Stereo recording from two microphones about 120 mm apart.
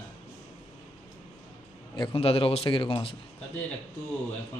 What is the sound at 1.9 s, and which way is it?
A man's voice, 50° left (ahead or behind).